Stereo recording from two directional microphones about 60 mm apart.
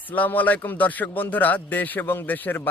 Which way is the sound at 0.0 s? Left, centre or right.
Left.